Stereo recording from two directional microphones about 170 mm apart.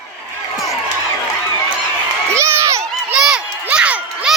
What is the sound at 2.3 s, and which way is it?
Crowd, 15° right (ahead or behind).